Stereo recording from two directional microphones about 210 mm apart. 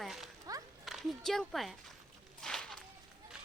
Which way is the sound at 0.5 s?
15° right (ahead or behind).